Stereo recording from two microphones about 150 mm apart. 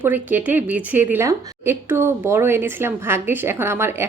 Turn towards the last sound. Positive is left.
turn(degrees=-15)  # may be behind; listen again after turning